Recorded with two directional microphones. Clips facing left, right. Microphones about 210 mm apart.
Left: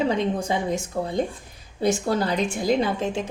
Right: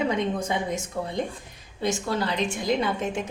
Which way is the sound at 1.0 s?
45° left (ahead or behind).